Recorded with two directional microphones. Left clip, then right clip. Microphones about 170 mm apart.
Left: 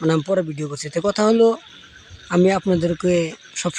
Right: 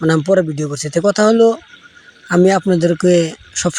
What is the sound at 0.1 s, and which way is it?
Speech, 20° right (ahead or behind).